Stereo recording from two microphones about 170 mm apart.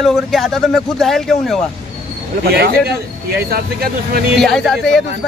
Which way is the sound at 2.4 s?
70° right (ahead or behind).